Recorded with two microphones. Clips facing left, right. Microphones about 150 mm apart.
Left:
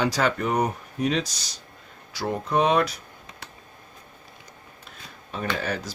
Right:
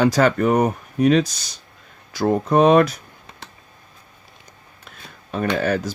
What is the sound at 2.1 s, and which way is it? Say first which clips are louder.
Speech: right 8 dB; 50° right (ahead or behind).